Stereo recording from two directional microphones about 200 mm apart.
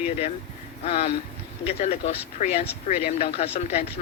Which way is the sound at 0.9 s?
35° left (ahead or behind).